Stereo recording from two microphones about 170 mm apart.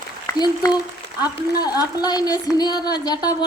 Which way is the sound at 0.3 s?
25° left (ahead or behind).